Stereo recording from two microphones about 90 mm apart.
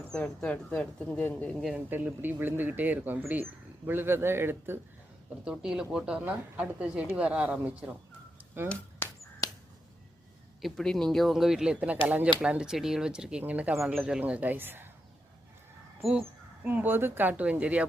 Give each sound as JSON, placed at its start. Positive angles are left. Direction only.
{"t": 0.0, "sound": "speech", "side_deg": 10}
{"t": 1.7, "sound": "speech", "side_deg": -20}
{"t": 5.5, "sound": "speech", "side_deg": -5}
{"t": 10.6, "sound": "speech", "side_deg": 0}
{"t": 16.6, "sound": "speech", "side_deg": -20}